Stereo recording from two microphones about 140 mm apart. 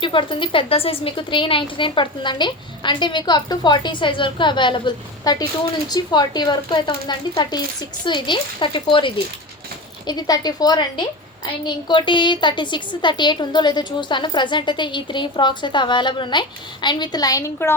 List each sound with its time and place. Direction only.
0.0 s a woman's voice: 35° left (ahead or behind); by 17.7 s 20° left (ahead or behind)